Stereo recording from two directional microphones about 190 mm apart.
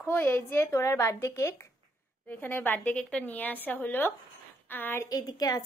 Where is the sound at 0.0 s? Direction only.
10° left (ahead or behind).